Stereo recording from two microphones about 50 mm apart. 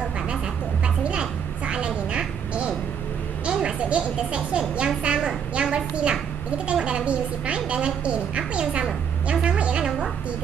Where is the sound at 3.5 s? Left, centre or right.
Centre.